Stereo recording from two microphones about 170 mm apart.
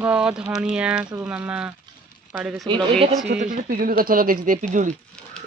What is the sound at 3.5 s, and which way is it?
Speech, 55° right (ahead or behind).